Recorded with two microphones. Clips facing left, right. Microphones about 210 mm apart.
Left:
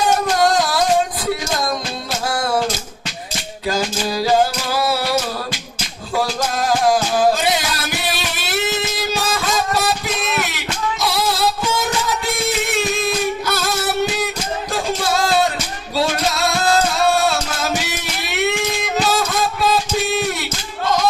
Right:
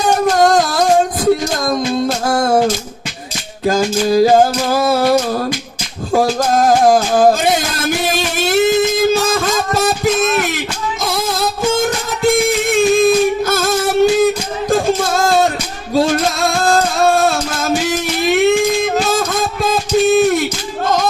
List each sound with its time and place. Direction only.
0.0 s music: 45° right (ahead or behind)
3.7 s music: 50° right (ahead or behind)